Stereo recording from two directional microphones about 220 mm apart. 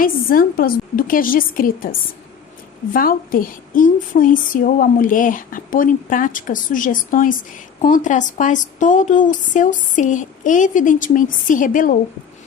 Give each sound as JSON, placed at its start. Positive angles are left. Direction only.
{"t": 0.0, "sound": "speech", "side_deg": 40}